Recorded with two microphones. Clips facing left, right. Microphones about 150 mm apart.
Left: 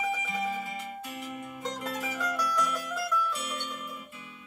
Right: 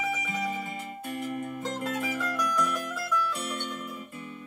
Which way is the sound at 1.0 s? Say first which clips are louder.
Right 6 dB; 50° right (ahead or behind).